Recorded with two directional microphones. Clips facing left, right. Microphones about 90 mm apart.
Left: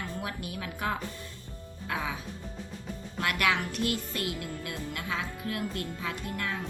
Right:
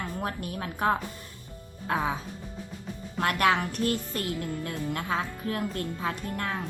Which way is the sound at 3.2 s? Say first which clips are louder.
Right 4 dB; 35° right (ahead or behind).